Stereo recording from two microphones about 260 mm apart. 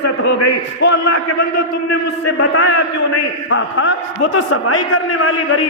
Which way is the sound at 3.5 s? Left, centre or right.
Left.